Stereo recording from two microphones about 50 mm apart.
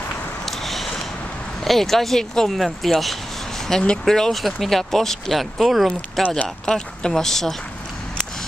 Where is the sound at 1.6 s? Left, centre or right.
Centre.